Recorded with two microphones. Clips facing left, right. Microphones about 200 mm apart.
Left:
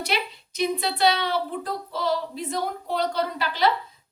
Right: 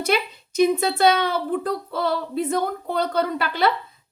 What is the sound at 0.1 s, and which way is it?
A woman's voice, 50° right (ahead or behind).